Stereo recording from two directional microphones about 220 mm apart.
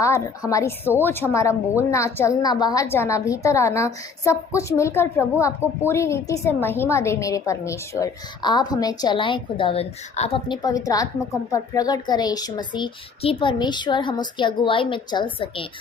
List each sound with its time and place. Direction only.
0.0 s a woman's voice: 15° left (ahead or behind)